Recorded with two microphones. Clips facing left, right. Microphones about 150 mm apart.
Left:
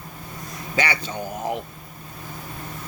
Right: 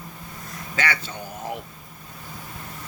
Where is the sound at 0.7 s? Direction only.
15° left (ahead or behind).